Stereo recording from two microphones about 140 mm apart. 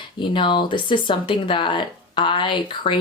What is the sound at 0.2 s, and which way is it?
Speech, 35° left (ahead or behind).